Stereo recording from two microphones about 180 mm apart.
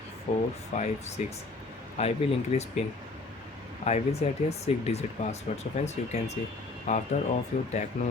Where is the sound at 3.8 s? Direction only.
35° left (ahead or behind).